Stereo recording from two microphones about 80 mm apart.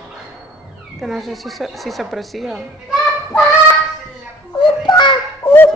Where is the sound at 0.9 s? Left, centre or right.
Centre.